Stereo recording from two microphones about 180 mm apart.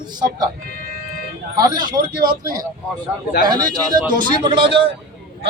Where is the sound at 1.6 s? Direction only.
20° right (ahead or behind).